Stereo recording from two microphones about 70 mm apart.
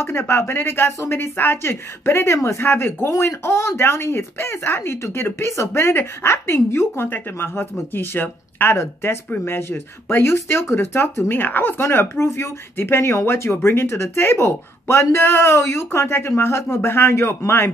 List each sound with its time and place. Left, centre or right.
0.0 s speech: left